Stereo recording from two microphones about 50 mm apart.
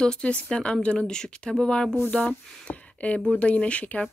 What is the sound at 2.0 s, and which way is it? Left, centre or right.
Speech, left.